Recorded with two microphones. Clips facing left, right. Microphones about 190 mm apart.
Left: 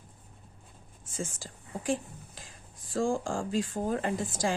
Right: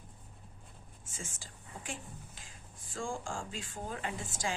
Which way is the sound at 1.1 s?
40° left (ahead or behind).